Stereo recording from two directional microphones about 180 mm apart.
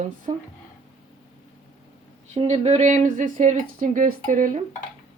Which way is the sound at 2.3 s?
35° right (ahead or behind).